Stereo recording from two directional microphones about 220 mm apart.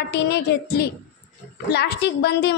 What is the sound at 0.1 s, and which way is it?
A woman's voice, 50° left (ahead or behind).